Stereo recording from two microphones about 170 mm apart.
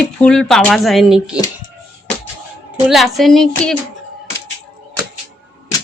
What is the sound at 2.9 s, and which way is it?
Speech, centre (ahead or behind).